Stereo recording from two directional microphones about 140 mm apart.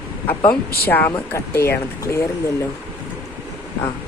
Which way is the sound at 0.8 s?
15° left (ahead or behind).